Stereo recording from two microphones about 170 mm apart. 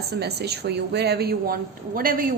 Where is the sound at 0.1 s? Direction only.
75° right (ahead or behind).